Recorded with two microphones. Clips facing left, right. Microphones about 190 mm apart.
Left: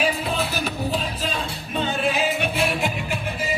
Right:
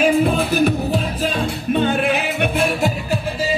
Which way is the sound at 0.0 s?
50° right (ahead or behind).